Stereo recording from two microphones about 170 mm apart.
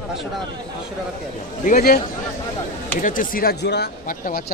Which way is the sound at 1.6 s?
60° left (ahead or behind).